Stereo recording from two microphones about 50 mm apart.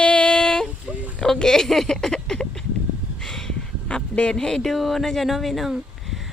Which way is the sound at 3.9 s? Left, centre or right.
Left.